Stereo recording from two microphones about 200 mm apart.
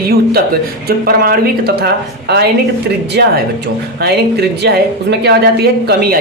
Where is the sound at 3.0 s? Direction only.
55° right (ahead or behind).